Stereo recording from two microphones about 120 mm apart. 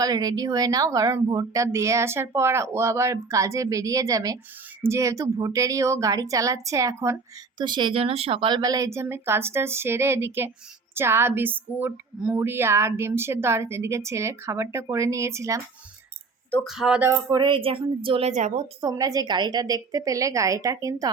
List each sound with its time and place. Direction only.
0.0 s speech: 30° right (ahead or behind)
7.6 s speech: 40° right (ahead or behind)
16.6 s speech: 5° right (ahead or behind)
17.0 s speech: 25° right (ahead or behind)
17.4 s a woman's voice: 45° right (ahead or behind)
18.3 s a woman's voice: 80° right
18.8 s speech: 30° right (ahead or behind)